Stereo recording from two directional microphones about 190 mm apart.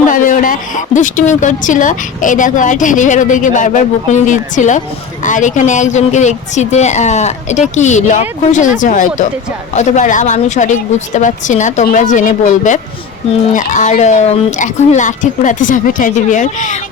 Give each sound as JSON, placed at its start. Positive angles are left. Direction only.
{"t": 0.1, "sound": "speech", "side_deg": 45}